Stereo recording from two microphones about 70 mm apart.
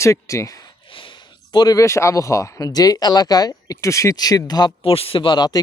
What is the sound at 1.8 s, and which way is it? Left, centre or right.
Speech, left.